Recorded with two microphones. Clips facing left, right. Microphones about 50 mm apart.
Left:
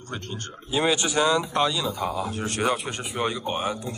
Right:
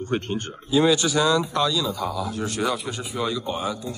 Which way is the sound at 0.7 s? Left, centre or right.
Left.